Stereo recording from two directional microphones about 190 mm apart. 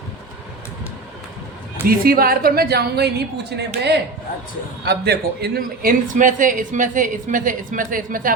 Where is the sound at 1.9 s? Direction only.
50° right (ahead or behind).